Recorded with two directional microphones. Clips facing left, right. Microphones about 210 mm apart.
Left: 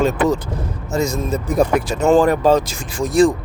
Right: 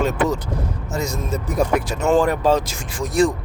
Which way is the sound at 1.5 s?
35° left (ahead or behind).